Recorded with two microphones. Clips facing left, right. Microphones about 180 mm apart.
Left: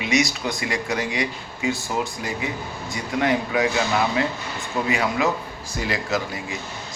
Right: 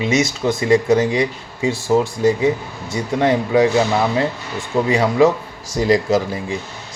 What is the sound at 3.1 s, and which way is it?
Speech, 30° right (ahead or behind).